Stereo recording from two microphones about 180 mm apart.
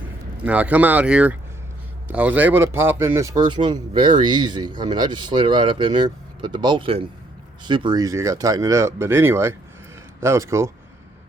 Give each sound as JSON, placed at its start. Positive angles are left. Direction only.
{"t": 0.4, "sound": "a man's voice", "side_deg": -10}